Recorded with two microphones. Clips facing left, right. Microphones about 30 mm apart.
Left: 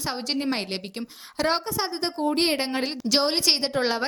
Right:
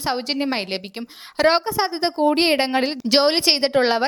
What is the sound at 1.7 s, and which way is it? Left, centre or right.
A woman's voice, right.